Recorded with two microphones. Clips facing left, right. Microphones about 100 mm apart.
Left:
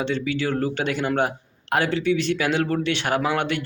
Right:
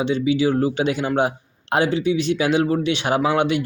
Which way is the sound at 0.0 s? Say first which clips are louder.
Right 6 dB; 15° right (ahead or behind).